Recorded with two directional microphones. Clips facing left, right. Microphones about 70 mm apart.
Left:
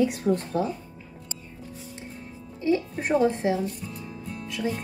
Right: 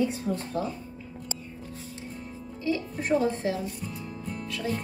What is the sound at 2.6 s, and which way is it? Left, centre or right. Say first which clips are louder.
Speech: left 5 dB; left.